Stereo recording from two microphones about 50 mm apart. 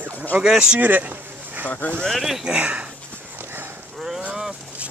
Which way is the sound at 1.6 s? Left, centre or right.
Left.